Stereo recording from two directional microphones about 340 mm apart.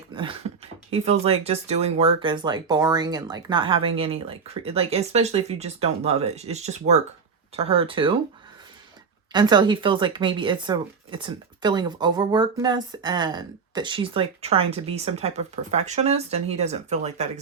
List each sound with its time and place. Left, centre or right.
0.1 s speech: centre
9.3 s speech: centre